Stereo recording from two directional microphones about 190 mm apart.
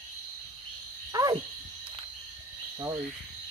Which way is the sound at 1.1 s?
20° right (ahead or behind).